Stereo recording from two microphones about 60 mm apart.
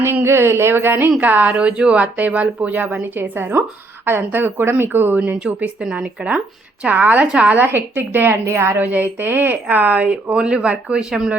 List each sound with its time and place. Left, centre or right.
0.1 s a woman's voice: right
5.8 s speech: centre
6.8 s speech: right
7.6 s a woman's voice: right; by 11.0 s centre